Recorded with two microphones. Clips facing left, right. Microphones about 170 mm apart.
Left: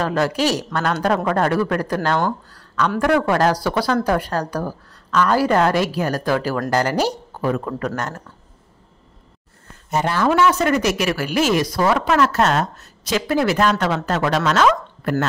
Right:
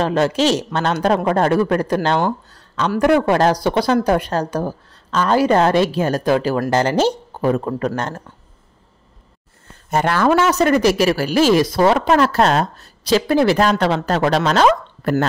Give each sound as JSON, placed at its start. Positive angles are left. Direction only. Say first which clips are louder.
{"t": 0.0, "sound": "speech", "louder": "right 3 dB", "side_deg": -25}
{"t": 2.5, "sound": "a sound", "louder": "even", "side_deg": -20}
{"t": 3.0, "sound": "speech", "louder": "right 3 dB", "side_deg": -20}
{"t": 9.8, "sound": "speech", "louder": "right 3 dB", "side_deg": -60}
{"t": 10.3, "sound": "a woman's voice", "louder": "right 1 dB", "side_deg": -40}